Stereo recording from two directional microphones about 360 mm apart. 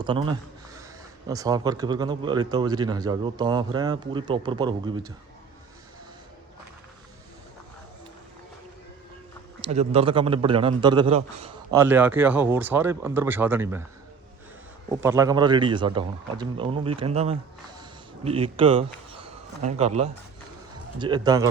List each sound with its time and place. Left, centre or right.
0.0 s speech: centre
9.7 s speech: centre
15.0 s speech: centre